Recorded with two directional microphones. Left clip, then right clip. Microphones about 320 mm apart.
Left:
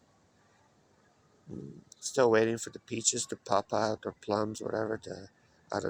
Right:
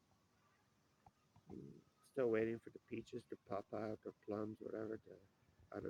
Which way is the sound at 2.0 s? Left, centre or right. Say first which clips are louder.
Left 14 dB; centre.